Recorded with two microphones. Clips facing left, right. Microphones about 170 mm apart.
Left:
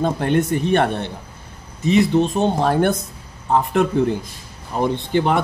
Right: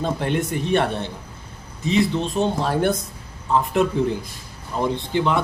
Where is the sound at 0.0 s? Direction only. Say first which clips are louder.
Left 4 dB; 50° left (ahead or behind).